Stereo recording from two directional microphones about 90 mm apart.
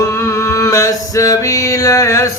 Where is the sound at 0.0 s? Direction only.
35° left (ahead or behind).